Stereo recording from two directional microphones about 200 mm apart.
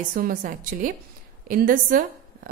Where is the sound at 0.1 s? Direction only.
45° right (ahead or behind).